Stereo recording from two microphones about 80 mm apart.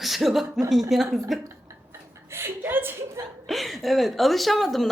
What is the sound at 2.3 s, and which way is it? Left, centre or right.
Speech, right.